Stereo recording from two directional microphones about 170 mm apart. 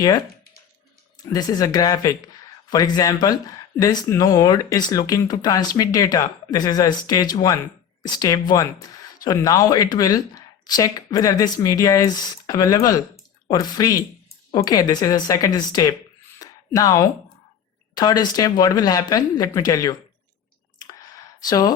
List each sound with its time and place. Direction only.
1.2 s speech: 20° left (ahead or behind)
16.4 s a sound: 20° left (ahead or behind)
17.9 s speech: 25° left (ahead or behind)
21.4 s speech: 20° left (ahead or behind)